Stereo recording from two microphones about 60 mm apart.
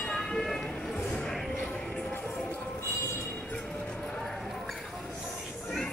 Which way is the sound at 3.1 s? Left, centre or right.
Left.